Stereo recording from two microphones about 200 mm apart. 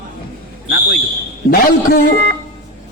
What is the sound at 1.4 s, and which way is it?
Speech, 50° left (ahead or behind).